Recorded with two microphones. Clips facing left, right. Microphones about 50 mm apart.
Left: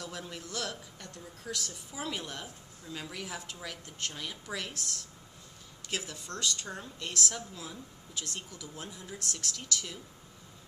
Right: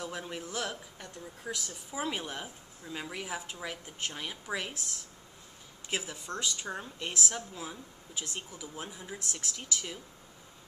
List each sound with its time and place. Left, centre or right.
0.0 s speech: right